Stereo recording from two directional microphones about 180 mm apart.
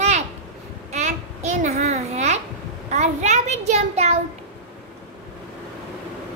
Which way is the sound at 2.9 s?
40° right (ahead or behind).